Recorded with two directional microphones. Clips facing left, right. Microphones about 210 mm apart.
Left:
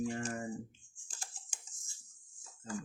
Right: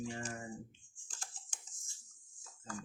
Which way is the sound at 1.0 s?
5° left (ahead or behind).